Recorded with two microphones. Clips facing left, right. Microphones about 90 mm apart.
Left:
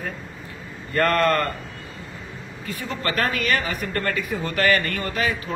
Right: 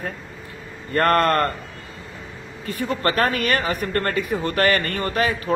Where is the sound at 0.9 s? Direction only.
40° right (ahead or behind).